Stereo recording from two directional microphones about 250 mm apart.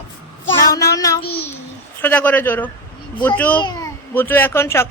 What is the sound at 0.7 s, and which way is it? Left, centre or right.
Speech, centre.